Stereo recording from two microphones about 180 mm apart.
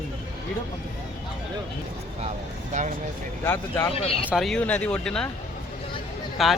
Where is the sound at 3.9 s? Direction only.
35° left (ahead or behind).